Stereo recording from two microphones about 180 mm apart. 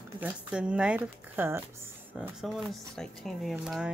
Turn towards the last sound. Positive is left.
turn(degrees=0)  # may be behind; listen again after turning